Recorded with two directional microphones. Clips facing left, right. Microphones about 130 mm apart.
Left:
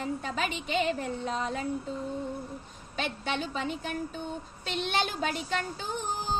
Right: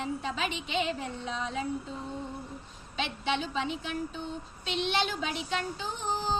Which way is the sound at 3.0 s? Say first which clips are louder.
Right 1 dB; 45° left (ahead or behind).